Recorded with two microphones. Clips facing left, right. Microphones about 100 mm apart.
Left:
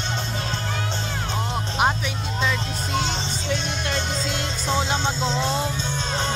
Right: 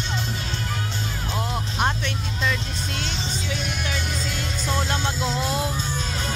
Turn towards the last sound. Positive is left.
turn(degrees=-5)  # may be behind; listen again after turning